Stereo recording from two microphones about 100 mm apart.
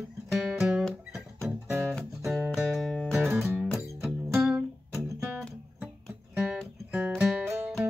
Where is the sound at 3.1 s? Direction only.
15° right (ahead or behind).